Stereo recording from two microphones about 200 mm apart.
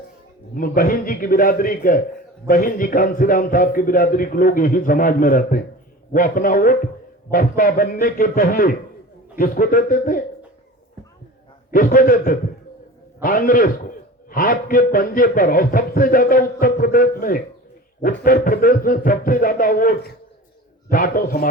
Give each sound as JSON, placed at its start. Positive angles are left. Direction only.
{"t": 0.5, "sound": "a man's voice", "side_deg": 45}
{"t": 11.7, "sound": "a man's voice", "side_deg": 45}